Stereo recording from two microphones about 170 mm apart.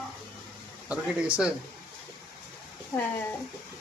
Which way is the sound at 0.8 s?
5° right (ahead or behind).